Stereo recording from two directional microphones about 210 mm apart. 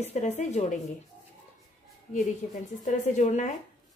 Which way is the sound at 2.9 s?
35° left (ahead or behind).